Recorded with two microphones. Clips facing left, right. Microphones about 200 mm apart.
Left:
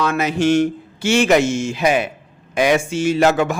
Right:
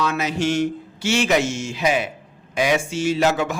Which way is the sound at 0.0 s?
55° left (ahead or behind).